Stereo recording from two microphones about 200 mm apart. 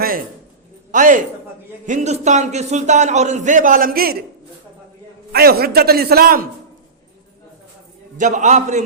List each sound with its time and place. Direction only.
0.9 s a man's voice: 40° right (ahead or behind)
5.3 s a man's voice: 50° right (ahead or behind)
8.2 s a man's voice: 35° right (ahead or behind)